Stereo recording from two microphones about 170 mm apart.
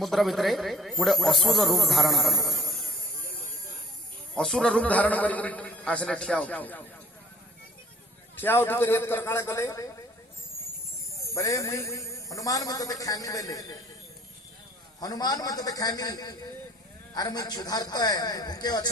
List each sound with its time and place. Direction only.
0.0 s speech: centre (ahead or behind)
4.4 s a man's voice: 5° left (ahead or behind)
8.4 s a man's voice: 10° left (ahead or behind)
11.3 s a woman's voice: 20° left (ahead or behind)
15.0 s a woman's voice: 20° left (ahead or behind)